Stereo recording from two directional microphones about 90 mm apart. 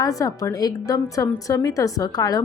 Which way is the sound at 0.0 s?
40° left (ahead or behind).